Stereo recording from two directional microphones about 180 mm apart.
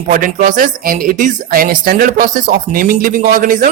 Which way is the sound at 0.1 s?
50° right (ahead or behind).